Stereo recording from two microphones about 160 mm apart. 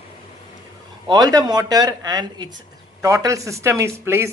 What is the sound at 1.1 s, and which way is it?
Speech, 25° right (ahead or behind).